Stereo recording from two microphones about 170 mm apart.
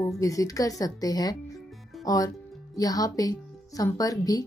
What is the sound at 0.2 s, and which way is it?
A woman's voice, 20° left (ahead or behind).